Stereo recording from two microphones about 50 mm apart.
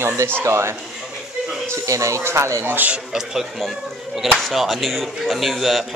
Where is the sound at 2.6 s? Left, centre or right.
Right.